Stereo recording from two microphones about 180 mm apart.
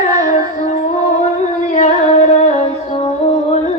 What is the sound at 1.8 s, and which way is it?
Music, 40° left (ahead or behind).